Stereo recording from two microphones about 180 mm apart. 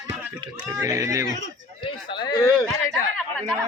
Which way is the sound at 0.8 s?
15° right (ahead or behind).